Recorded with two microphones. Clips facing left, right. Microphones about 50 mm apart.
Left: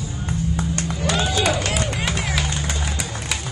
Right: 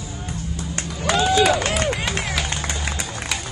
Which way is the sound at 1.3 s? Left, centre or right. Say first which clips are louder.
Right 4 dB; right.